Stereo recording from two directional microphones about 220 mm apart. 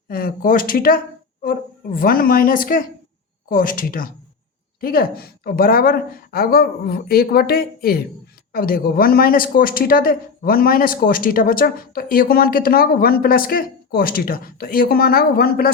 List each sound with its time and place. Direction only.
0.1 s a woman's voice: 40° left (ahead or behind)